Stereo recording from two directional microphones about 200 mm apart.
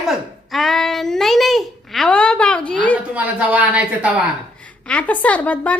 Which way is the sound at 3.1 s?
5° right (ahead or behind).